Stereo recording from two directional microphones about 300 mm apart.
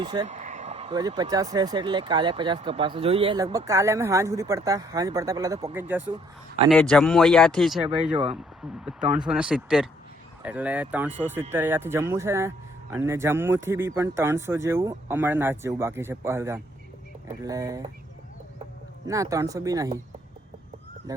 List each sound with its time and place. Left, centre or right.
0.0 s speech: centre
8.8 s speech: centre
19.0 s speech: centre